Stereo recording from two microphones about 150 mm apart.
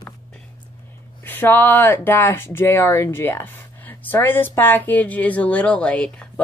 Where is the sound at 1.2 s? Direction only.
15° left (ahead or behind).